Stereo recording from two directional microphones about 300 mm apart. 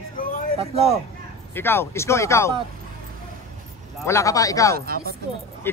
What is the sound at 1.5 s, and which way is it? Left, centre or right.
A man's voice, centre.